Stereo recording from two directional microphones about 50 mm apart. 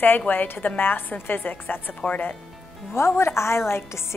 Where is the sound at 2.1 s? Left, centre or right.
Left.